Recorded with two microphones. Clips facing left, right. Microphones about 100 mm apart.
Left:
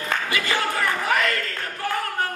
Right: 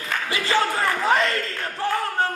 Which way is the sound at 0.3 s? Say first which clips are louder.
Right 6 dB; 30° right (ahead or behind).